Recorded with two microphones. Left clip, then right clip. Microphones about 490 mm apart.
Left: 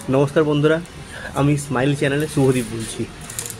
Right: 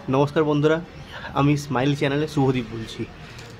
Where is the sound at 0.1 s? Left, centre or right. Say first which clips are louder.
Left 3 dB; right.